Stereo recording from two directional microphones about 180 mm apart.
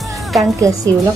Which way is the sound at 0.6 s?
20° right (ahead or behind).